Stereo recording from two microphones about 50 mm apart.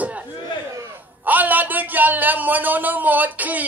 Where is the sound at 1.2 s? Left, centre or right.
Right.